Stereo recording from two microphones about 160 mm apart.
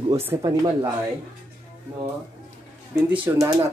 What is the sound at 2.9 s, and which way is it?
Speech, 15° right (ahead or behind).